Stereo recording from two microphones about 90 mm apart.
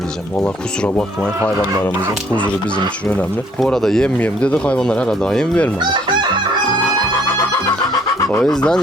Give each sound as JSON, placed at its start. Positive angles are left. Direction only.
{"t": 0.4, "sound": "speech", "side_deg": 10}
{"t": 2.7, "sound": "speech", "side_deg": 20}
{"t": 3.6, "sound": "speech", "side_deg": 5}
{"t": 8.4, "sound": "speech", "side_deg": 10}